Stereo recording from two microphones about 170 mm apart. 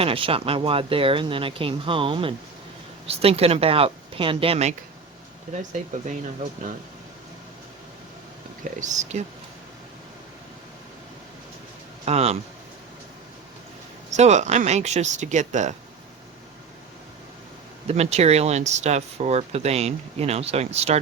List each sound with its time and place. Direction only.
0.0 s speech: 35° right (ahead or behind)
8.8 s speech: 45° right (ahead or behind)
12.0 s speech: 40° right (ahead or behind)
14.1 s speech: 40° right (ahead or behind)
17.8 s speech: 40° right (ahead or behind)